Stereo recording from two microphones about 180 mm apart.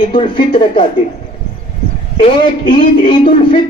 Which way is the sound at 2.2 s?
30° left (ahead or behind).